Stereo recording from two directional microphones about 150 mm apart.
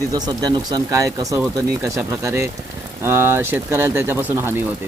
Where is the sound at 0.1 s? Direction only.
25° right (ahead or behind).